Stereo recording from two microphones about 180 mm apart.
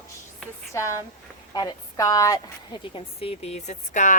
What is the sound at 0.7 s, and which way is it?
A woman's voice, 15° left (ahead or behind).